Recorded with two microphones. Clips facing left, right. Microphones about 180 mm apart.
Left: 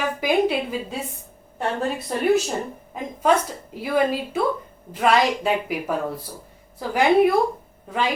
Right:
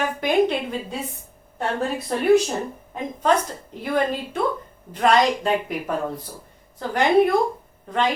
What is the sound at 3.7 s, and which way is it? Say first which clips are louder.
A woman's voice: left 2 dB; 5° left (ahead or behind).